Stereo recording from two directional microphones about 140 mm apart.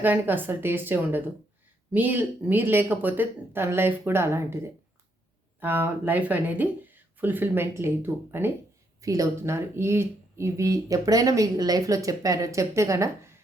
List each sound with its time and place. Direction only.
0.0 s speech: 15° right (ahead or behind)